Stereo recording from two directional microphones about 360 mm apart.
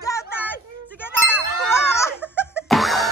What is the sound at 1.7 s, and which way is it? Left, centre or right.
Music, centre.